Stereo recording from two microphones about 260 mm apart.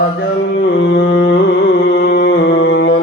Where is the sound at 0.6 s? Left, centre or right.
Left.